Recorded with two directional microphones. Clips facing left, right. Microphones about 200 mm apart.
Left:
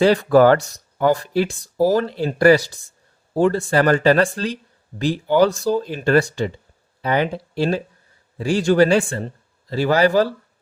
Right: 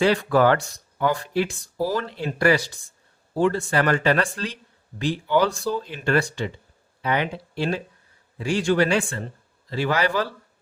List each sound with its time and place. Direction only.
0.0 s a man's voice: 40° left (ahead or behind)